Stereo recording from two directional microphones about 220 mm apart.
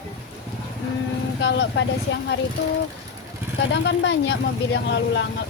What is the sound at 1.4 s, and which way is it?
Speech, 50° left (ahead or behind).